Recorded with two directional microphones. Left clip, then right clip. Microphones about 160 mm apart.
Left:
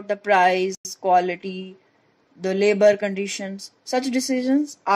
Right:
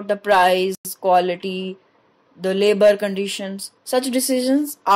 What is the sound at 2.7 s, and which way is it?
A woman's voice, 40° right (ahead or behind).